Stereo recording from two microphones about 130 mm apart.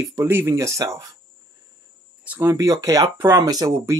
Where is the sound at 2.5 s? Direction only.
25° right (ahead or behind).